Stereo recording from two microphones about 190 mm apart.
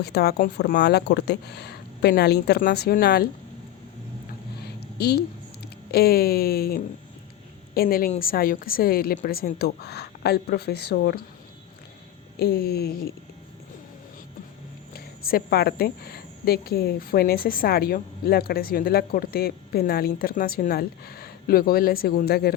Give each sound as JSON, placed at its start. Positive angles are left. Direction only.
{"t": 0.0, "sound": "speech", "side_deg": 55}
{"t": 4.6, "sound": "a sound", "side_deg": 60}
{"t": 5.9, "sound": "a woman's voice", "side_deg": 55}
{"t": 12.4, "sound": "speech", "side_deg": 55}
{"t": 14.9, "sound": "a woman's voice", "side_deg": 50}